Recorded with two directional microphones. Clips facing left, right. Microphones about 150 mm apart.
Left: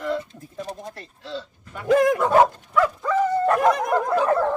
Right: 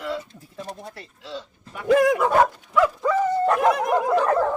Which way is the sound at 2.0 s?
5° right (ahead or behind).